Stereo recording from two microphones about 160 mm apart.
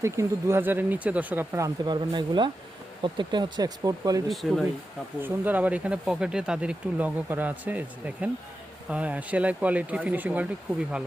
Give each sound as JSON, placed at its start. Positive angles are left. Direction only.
{"t": 0.0, "sound": "speech", "side_deg": -15}
{"t": 4.3, "sound": "speech", "side_deg": 0}
{"t": 5.2, "sound": "speech", "side_deg": -10}